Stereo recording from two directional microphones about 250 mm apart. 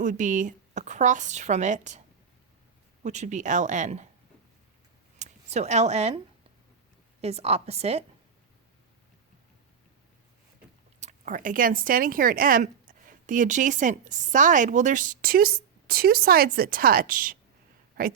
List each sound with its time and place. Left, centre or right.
0.0 s a woman's voice: right
3.0 s a woman's voice: right
5.2 s speech: right
7.2 s a woman's voice: right
11.0 s speech: right